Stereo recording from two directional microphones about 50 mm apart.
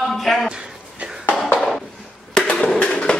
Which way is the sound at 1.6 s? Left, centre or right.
Centre.